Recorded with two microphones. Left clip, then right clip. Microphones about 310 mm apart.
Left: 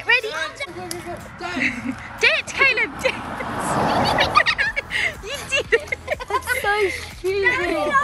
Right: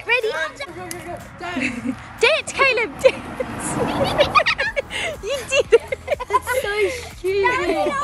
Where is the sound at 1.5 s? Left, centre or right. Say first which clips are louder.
Left 2 dB; centre.